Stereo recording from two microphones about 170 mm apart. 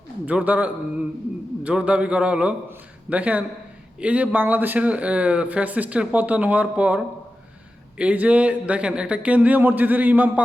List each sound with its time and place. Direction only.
0.3 s speech: 10° right (ahead or behind)